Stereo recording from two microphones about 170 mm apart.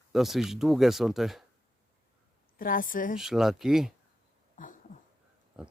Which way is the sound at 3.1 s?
Centre (ahead or behind).